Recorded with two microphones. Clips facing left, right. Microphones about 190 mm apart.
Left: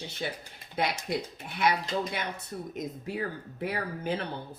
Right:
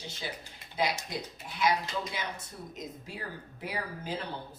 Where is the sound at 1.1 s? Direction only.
60° left (ahead or behind).